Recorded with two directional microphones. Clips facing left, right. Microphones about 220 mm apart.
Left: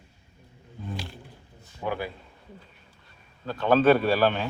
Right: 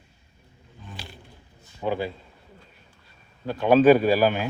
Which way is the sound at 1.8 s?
20° right (ahead or behind).